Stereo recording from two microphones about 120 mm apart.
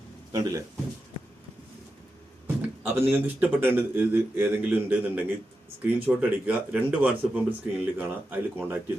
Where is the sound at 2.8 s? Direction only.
20° right (ahead or behind).